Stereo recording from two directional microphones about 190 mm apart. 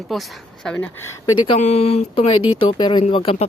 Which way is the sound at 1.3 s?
25° left (ahead or behind).